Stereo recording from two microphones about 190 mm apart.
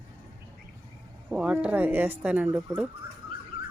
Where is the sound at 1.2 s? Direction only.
5° right (ahead or behind).